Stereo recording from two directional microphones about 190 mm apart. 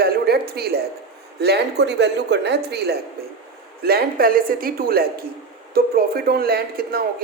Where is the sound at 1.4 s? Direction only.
60° right (ahead or behind).